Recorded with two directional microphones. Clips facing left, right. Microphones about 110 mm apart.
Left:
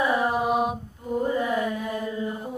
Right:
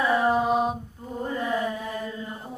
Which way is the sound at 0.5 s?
30° right (ahead or behind).